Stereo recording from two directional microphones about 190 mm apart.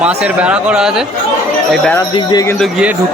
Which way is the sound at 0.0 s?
5° right (ahead or behind).